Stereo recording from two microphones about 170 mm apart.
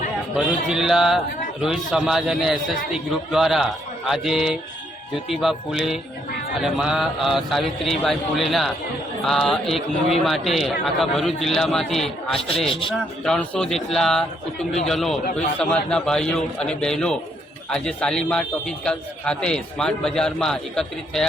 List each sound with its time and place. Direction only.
0.3 s a man's voice: 5° right (ahead or behind)
12.6 s speech: 30° left (ahead or behind)
13.2 s a man's voice: 5° left (ahead or behind)